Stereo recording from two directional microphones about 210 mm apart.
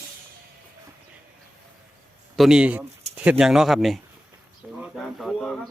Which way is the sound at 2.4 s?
5° right (ahead or behind).